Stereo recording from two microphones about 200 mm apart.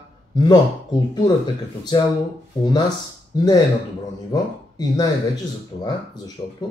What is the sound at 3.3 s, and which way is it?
Speech, 20° left (ahead or behind).